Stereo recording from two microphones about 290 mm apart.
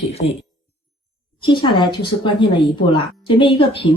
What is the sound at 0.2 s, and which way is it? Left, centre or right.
Speech, left.